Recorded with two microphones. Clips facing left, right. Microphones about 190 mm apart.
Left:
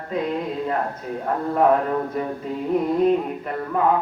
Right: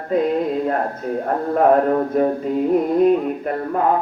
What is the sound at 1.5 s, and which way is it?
Speech, 50° right (ahead or behind).